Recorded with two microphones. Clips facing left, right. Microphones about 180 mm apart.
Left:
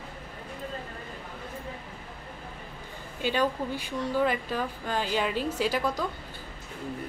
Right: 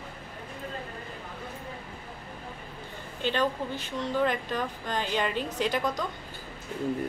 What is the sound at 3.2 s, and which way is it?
Speech, 10° left (ahead or behind).